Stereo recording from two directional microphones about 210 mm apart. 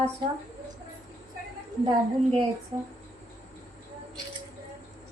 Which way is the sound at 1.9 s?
25° right (ahead or behind).